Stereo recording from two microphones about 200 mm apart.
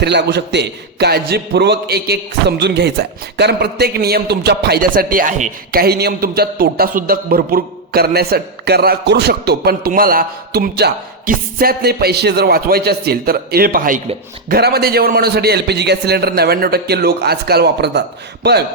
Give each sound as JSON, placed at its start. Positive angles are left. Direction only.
{"t": 0.0, "sound": "a man's voice", "side_deg": -60}